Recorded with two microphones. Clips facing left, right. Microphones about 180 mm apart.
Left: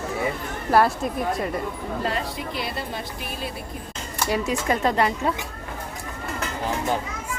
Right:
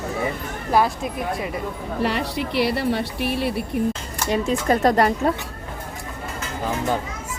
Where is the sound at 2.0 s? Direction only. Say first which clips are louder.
Right 6 dB; 75° right (ahead or behind).